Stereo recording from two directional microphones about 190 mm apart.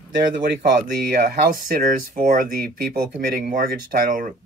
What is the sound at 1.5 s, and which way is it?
Speech, 45° right (ahead or behind).